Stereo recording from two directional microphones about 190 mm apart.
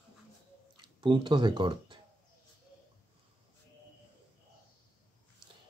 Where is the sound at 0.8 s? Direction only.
25° right (ahead or behind).